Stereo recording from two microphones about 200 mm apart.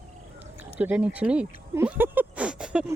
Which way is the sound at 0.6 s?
10° right (ahead or behind).